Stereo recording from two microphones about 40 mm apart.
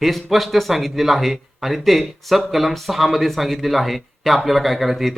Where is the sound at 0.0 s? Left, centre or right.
Centre.